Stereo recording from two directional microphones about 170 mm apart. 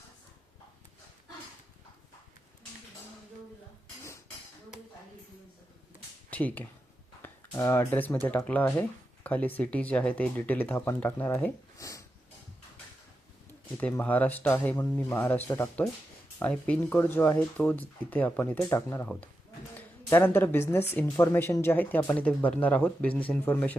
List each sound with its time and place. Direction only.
6.3 s speech: 10° left (ahead or behind)
13.7 s speech: 10° left (ahead or behind)